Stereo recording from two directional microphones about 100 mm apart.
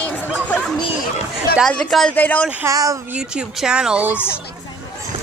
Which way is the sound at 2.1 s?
15° left (ahead or behind).